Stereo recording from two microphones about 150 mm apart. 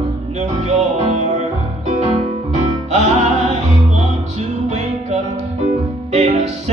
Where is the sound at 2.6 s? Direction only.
50° right (ahead or behind).